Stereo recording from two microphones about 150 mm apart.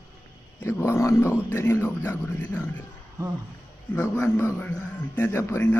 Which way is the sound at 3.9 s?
15° left (ahead or behind).